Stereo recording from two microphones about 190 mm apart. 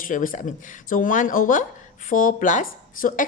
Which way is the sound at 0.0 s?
45° left (ahead or behind).